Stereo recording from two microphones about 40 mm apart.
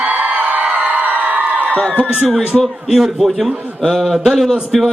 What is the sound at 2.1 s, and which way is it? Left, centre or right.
A man's voice, centre.